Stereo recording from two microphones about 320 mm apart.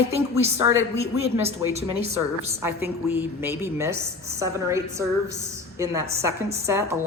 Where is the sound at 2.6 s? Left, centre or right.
Centre.